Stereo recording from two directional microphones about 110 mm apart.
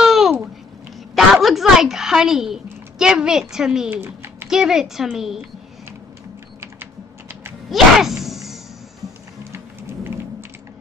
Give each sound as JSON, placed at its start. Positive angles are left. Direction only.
{"t": 0.0, "sound": "babbling", "side_deg": -5}
{"t": 1.1, "sound": "speech", "side_deg": 0}
{"t": 3.9, "sound": "a sound", "side_deg": -20}
{"t": 4.5, "sound": "a woman's voice", "side_deg": -5}
{"t": 7.7, "sound": "a sound", "side_deg": -5}
{"t": 9.5, "sound": "music", "side_deg": -25}